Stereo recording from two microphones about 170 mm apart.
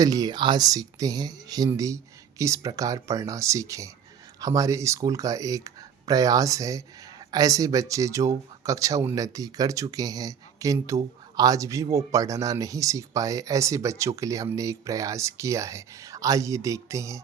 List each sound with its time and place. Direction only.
0.0 s speech: 20° right (ahead or behind)